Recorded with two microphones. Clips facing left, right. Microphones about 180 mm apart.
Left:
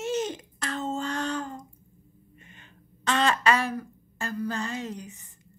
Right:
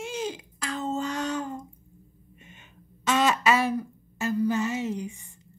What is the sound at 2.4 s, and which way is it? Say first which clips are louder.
Gasp: right 2 dB; 20° right (ahead or behind).